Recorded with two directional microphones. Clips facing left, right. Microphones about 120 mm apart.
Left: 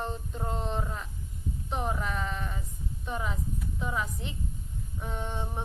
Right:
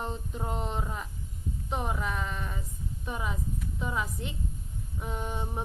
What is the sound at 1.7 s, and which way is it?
Speech, centre (ahead or behind).